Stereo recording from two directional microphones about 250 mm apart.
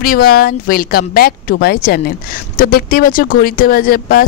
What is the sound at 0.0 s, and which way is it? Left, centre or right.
Speech, left.